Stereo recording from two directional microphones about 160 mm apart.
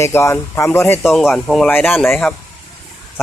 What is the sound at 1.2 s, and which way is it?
Speech, centre (ahead or behind).